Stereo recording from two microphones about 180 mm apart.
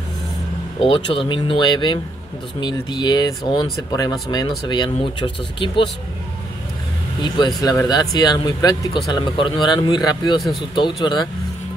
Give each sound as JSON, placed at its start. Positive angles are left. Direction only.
{"t": 0.8, "sound": "speech", "side_deg": 30}
{"t": 7.2, "sound": "speech", "side_deg": 25}